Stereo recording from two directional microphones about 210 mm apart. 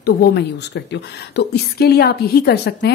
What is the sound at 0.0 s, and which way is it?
Speech, 50° left (ahead or behind).